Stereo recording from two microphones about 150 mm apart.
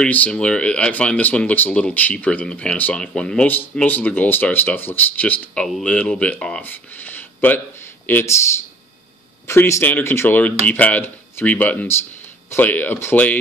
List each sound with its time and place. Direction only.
0.0 s speech: 10° left (ahead or behind)